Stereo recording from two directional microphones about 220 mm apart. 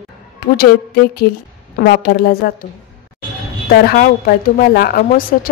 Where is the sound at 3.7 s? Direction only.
45° left (ahead or behind).